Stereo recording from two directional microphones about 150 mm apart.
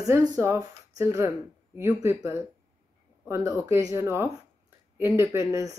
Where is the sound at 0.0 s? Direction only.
20° right (ahead or behind).